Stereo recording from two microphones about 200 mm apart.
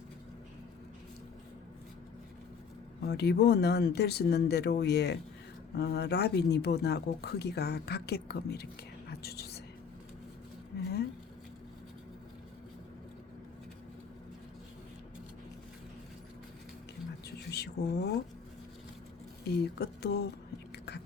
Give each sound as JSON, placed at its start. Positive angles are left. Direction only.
{"t": 3.0, "sound": "speech", "side_deg": 55}
{"t": 9.0, "sound": "whispering", "side_deg": 55}
{"t": 17.2, "sound": "a sound", "side_deg": 55}
{"t": 19.5, "sound": "speech", "side_deg": 55}
{"t": 20.7, "sound": "chewing", "side_deg": 55}